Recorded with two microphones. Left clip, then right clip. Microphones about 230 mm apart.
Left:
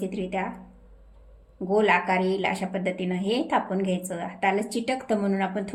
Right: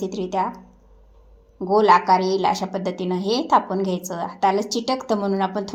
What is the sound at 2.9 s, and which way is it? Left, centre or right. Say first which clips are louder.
A woman's voice: right 4 dB; centre.